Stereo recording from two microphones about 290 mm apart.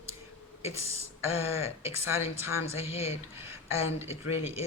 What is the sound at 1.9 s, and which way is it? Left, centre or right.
Speech, centre.